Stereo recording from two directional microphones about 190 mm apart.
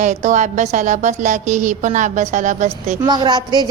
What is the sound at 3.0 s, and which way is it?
Speech, 20° right (ahead or behind).